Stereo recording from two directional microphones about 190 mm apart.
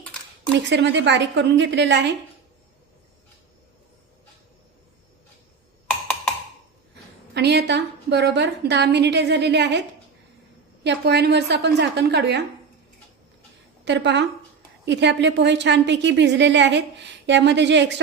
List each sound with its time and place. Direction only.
0.7 s a woman's voice: 70° right (ahead or behind)
7.3 s a woman's voice: 60° right (ahead or behind)
10.8 s a woman's voice: 60° right (ahead or behind)
13.8 s a woman's voice: 65° right (ahead or behind)